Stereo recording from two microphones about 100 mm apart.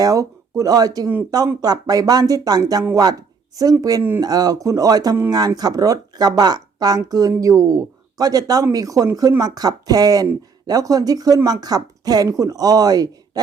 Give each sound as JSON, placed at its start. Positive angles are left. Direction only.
{"t": 0.0, "sound": "speech", "side_deg": -35}